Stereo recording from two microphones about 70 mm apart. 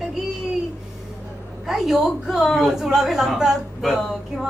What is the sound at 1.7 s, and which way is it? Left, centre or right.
A woman's voice, centre.